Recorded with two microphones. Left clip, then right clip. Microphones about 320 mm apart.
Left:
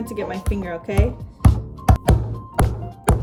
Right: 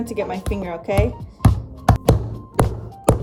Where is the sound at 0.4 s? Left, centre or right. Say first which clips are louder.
Right 2 dB; centre.